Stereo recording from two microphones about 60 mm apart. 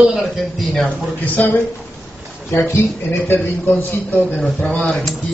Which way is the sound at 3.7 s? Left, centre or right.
Left.